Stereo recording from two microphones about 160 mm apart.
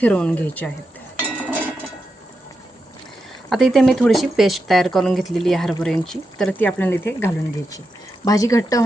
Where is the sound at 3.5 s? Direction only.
Centre (ahead or behind).